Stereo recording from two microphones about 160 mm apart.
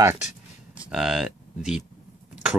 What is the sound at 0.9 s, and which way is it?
Speech, 5° right (ahead or behind).